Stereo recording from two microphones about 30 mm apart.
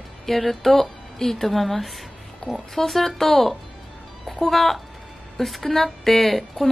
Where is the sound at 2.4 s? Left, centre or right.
Left.